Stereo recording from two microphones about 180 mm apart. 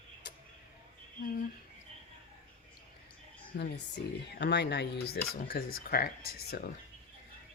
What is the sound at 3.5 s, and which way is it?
Speech, 65° left (ahead or behind).